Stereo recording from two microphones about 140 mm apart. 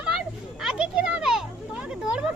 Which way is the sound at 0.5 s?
5° right (ahead or behind).